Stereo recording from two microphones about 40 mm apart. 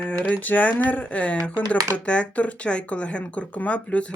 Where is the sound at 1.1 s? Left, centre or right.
Left.